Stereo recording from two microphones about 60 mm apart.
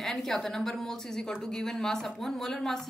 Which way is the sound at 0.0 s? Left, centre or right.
Centre.